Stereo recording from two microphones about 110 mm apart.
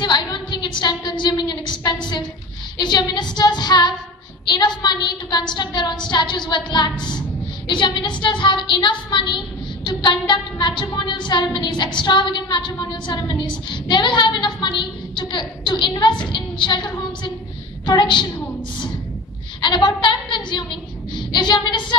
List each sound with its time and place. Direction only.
0.0 s a sound: 40° left (ahead or behind)
2.8 s a woman's voice: 40° left (ahead or behind)
3.3 s female singing: 40° left (ahead or behind)
4.5 s a woman's voice: 40° left (ahead or behind)
17.8 s female singing: 45° left (ahead or behind)
19.6 s a woman's voice: 45° left (ahead or behind)